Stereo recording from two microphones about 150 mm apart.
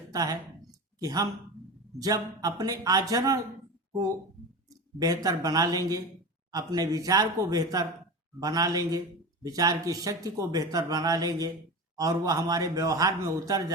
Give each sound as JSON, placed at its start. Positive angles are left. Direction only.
{"t": 0.1, "sound": "a woman's voice", "side_deg": -25}
{"t": 4.9, "sound": "speech", "side_deg": -25}